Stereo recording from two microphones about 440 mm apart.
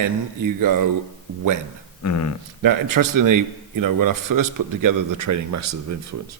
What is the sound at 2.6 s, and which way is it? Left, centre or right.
A man's voice, right.